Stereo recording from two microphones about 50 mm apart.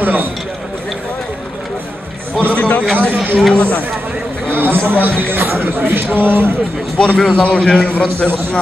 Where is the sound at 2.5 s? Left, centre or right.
Left.